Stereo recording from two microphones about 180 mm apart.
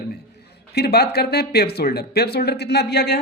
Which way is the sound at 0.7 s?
60° left (ahead or behind).